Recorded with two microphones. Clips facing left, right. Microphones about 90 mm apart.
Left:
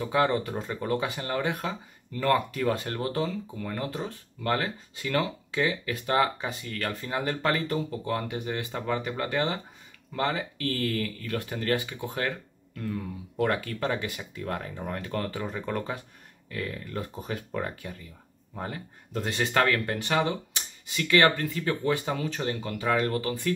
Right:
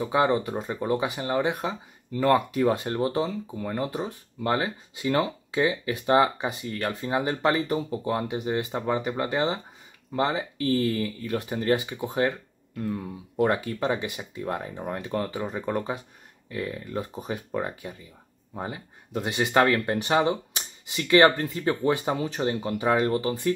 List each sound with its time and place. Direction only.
0.0 s speech: 20° right (ahead or behind)